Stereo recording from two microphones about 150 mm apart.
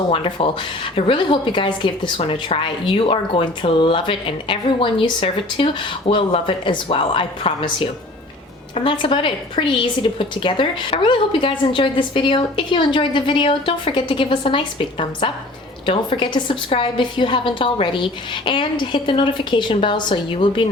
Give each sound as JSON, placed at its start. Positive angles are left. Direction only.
{"t": 0.1, "sound": "a woman's voice", "side_deg": 35}